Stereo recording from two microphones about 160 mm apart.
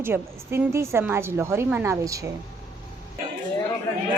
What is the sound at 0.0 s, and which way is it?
A woman's voice, 15° right (ahead or behind).